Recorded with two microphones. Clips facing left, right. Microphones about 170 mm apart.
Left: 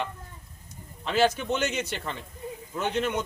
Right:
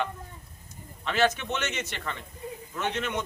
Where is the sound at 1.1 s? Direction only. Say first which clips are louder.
Left 2 dB; 35° left (ahead or behind).